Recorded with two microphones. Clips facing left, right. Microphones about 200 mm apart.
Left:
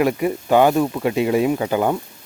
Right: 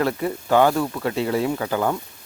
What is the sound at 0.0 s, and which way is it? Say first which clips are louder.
Speech: left 4 dB; 15° left (ahead or behind).